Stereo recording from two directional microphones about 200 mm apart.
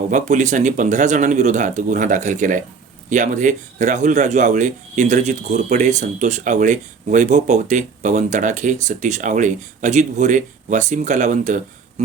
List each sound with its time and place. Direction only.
0.1 s a man's voice: 40° right (ahead or behind)